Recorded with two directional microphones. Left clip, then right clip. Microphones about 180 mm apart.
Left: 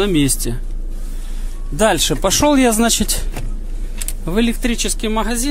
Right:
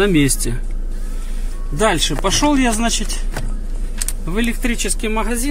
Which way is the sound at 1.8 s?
35° left (ahead or behind).